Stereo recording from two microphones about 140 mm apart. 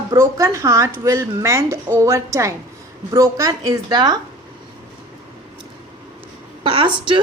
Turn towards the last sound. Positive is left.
turn(degrees=-35)  # may be behind; listen again after turning